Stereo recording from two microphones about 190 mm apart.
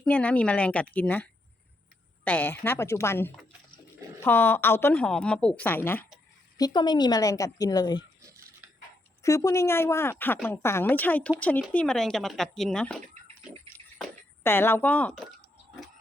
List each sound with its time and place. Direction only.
0.0 s speech: 5° left (ahead or behind)
6.6 s a woman's voice: 20° left (ahead or behind)
8.2 s a sound: 15° right (ahead or behind)
9.2 s speech: 15° left (ahead or behind)
14.4 s speech: 10° left (ahead or behind)